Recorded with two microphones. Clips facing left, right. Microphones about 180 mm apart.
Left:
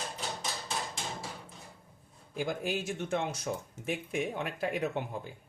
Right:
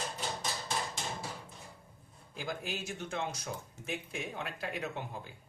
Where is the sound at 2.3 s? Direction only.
55° left (ahead or behind).